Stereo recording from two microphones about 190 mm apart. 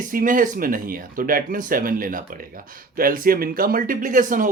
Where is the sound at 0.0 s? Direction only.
45° right (ahead or behind).